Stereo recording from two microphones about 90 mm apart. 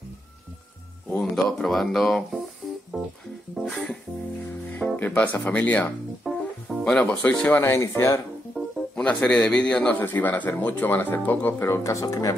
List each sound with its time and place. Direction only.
1.3 s speech: 5° left (ahead or behind)
2.9 s music: 15° right (ahead or behind)
3.6 s music: 10° left (ahead or behind)
4.6 s speech: 20° left (ahead or behind)
6.2 s music: centre (ahead or behind)
6.8 s speech: 10° left (ahead or behind)
7.2 s speech: 20° left (ahead or behind)
8.5 s speech: 10° left (ahead or behind); by 12.4 s 40° left (ahead or behind)